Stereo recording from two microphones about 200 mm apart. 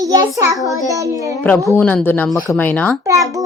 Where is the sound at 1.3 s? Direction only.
10° left (ahead or behind).